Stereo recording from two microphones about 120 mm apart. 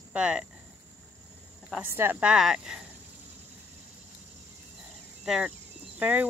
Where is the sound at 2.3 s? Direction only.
5° right (ahead or behind).